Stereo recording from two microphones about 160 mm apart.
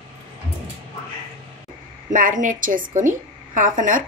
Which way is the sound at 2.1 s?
55° right (ahead or behind).